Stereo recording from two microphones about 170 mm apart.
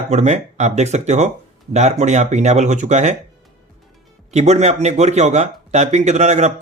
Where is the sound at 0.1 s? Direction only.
40° right (ahead or behind).